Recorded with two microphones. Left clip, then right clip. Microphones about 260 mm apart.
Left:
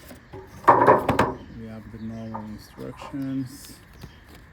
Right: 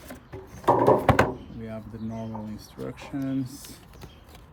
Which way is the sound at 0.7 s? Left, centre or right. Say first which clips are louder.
Left 4 dB; right.